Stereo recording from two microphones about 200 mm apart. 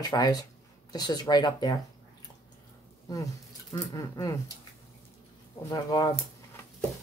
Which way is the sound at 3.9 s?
15° left (ahead or behind).